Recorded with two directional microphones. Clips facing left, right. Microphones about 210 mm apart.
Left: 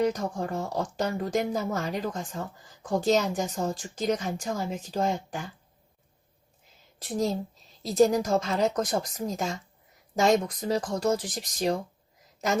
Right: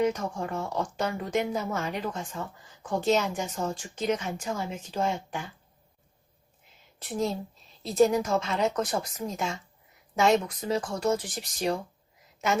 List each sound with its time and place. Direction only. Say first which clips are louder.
0.0 s speech: left 1 dB; 35° left (ahead or behind)
7.0 s speech: left 2 dB; 40° left (ahead or behind)